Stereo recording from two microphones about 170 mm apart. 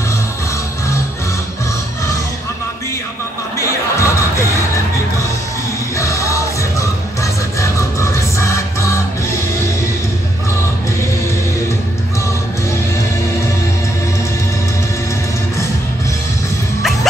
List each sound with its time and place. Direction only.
3.5 s music: 15° left (ahead or behind)
5.9 s music: 15° left (ahead or behind)